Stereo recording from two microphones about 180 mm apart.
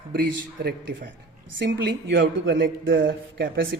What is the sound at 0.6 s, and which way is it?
A man's voice, 80° right.